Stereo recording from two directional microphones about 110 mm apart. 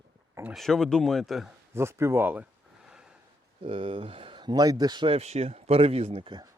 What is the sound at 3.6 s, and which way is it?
Speech, 55° right (ahead or behind).